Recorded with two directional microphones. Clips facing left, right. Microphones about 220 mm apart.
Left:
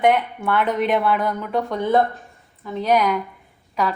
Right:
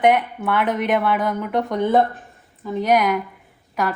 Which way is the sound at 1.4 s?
20° right (ahead or behind).